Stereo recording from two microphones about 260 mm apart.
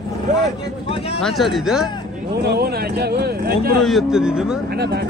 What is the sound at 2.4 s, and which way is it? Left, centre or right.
Speech, right.